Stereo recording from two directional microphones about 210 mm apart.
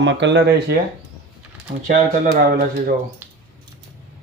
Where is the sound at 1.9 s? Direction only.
45° right (ahead or behind).